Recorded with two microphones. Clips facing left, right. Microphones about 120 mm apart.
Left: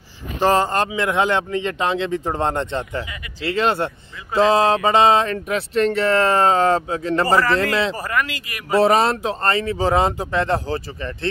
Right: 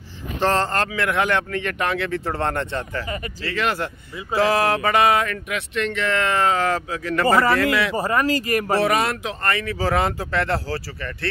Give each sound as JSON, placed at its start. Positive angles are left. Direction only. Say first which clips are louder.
{"t": 0.4, "sound": "speech", "louder": "left 3 dB", "side_deg": 10}
{"t": 7.9, "sound": "speech", "louder": "right 4 dB", "side_deg": -30}
{"t": 8.8, "sound": "speech", "louder": "left 5 dB", "side_deg": 30}